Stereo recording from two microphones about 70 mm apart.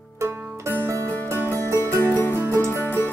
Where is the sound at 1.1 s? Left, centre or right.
Left.